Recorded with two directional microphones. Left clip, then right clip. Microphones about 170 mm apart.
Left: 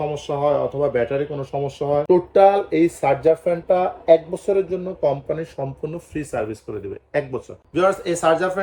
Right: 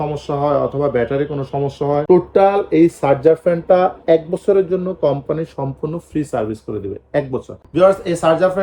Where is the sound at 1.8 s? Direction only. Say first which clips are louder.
Right 3 dB; 45° right (ahead or behind).